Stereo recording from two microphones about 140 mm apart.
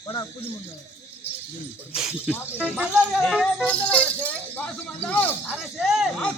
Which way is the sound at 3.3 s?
5° right (ahead or behind).